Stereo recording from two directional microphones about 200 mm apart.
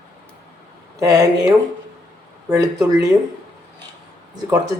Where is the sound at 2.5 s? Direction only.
15° right (ahead or behind).